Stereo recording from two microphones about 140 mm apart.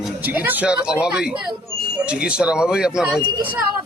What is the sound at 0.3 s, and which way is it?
Speech, 10° right (ahead or behind).